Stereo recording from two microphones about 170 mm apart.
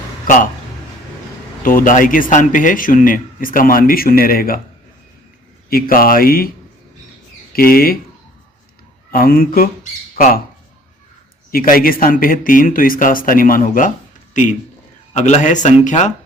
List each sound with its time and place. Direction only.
1.6 s a man's voice: 55° left (ahead or behind)
5.6 s speech: 60° left (ahead or behind)
7.5 s speech: 60° left (ahead or behind)
9.1 s speech: 55° left (ahead or behind)
11.5 s a man's voice: 55° left (ahead or behind)